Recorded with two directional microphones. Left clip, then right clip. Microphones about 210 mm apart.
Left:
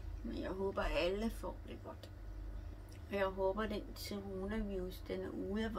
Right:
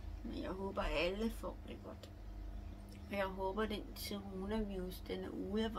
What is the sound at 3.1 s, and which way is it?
A woman's voice, 5° right (ahead or behind).